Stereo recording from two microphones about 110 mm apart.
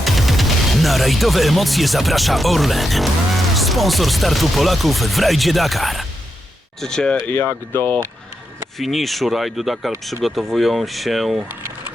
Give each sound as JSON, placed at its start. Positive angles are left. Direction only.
{"t": 0.0, "sound": "speech", "side_deg": 0}
{"t": 7.3, "sound": "speech", "side_deg": 20}
{"t": 8.8, "sound": "speech", "side_deg": 0}